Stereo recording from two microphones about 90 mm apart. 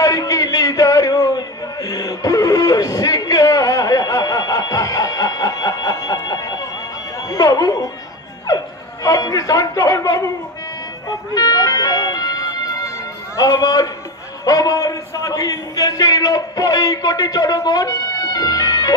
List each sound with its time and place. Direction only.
0.0 s a sound: 40° left (ahead or behind)
7.2 s speech: 40° left (ahead or behind)
11.3 s a man's voice: 45° left (ahead or behind)